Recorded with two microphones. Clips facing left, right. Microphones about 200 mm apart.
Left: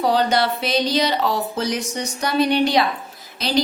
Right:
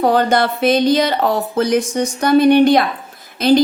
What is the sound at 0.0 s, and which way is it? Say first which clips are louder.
A woman's voice: right 4 dB; 50° right (ahead or behind).